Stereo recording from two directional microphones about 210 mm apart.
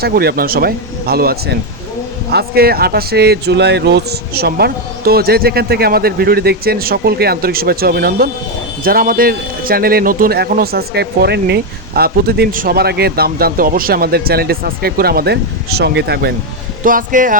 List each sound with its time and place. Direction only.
0.0 s a man's voice: 50° right (ahead or behind)
16.8 s speech: 40° right (ahead or behind)